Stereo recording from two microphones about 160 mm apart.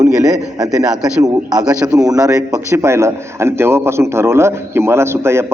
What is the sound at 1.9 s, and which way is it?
A man's voice, 20° right (ahead or behind).